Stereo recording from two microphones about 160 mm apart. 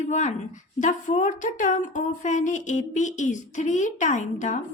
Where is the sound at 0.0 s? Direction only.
45° left (ahead or behind).